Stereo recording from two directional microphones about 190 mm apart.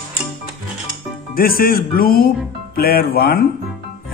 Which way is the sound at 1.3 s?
50° left (ahead or behind).